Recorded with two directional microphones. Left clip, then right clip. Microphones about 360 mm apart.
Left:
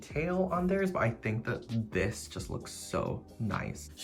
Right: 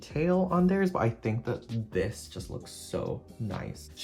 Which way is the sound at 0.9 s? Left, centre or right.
Centre.